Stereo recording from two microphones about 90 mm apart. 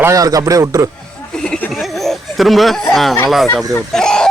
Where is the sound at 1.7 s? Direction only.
Centre (ahead or behind).